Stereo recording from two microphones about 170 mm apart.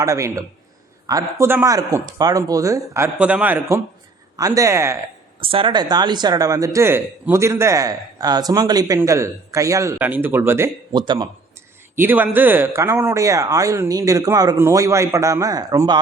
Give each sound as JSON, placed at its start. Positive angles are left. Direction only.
{"t": 0.0, "sound": "speech", "side_deg": -20}
{"t": 5.4, "sound": "speech", "side_deg": -30}
{"t": 10.9, "sound": "speech", "side_deg": -25}
{"t": 11.9, "sound": "speech", "side_deg": -10}